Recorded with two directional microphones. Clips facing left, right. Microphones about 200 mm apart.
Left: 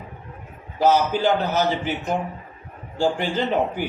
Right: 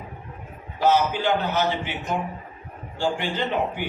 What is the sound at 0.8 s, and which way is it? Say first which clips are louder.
A man's voice: left 2 dB; 40° left (ahead or behind).